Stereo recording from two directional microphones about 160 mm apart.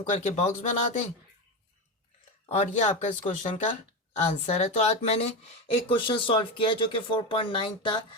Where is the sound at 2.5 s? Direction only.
45° left (ahead or behind).